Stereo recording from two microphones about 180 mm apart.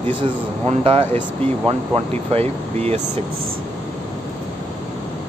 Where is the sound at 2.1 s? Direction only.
35° right (ahead or behind).